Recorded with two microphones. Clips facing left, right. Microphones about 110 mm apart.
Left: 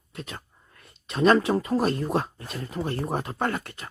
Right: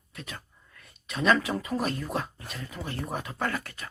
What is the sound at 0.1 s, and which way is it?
Speech, 30° left (ahead or behind).